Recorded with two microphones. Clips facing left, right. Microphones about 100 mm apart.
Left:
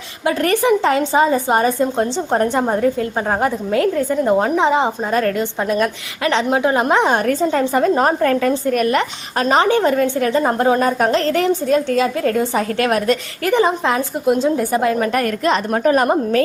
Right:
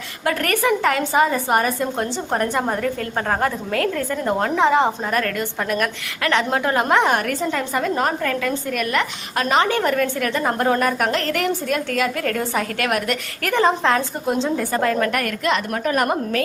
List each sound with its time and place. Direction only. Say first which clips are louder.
0.3 s a woman's voice: left 4 dB; 20° left (ahead or behind)
13.5 s a woman's voice: left 2 dB; 15° left (ahead or behind)
15.1 s a woman's voice: left 4 dB; 35° left (ahead or behind)